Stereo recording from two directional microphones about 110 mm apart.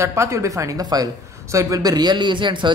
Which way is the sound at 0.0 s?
25° right (ahead or behind).